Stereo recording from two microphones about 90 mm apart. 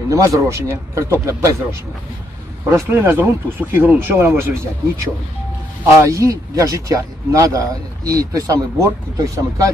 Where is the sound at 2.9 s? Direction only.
25° right (ahead or behind).